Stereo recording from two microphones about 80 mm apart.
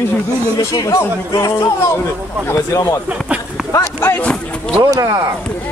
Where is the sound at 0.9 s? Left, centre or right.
Left.